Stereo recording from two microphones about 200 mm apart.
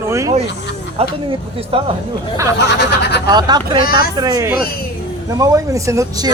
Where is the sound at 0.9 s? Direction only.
25° right (ahead or behind).